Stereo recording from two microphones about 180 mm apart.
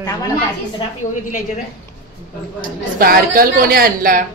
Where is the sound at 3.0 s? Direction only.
55° right (ahead or behind).